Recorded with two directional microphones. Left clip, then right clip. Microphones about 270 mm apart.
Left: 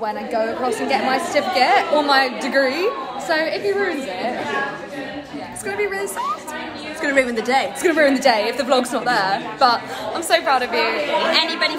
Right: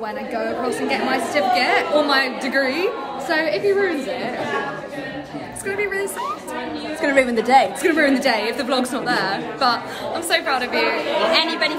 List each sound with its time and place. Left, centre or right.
0.0 s a woman's voice: centre
5.7 s a woman's voice: centre
7.0 s a woman's voice: centre
7.8 s a woman's voice: centre